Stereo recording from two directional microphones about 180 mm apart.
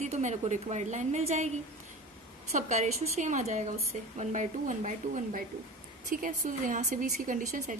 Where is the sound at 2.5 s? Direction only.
40° right (ahead or behind).